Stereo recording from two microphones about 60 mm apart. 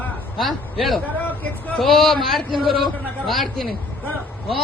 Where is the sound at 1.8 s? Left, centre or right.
Centre.